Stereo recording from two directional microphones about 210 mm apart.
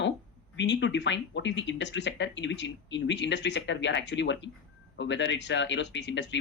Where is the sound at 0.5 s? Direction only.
60° left (ahead or behind).